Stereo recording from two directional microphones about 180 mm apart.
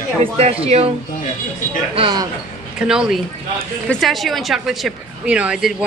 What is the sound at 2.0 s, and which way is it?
Speech, 25° right (ahead or behind).